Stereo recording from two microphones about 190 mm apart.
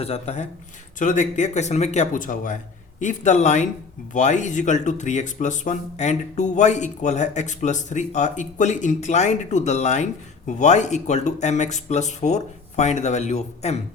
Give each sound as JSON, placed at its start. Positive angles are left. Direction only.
{"t": 0.0, "sound": "speech", "side_deg": 35}